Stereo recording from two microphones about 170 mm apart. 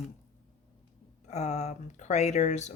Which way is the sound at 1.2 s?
40° left (ahead or behind).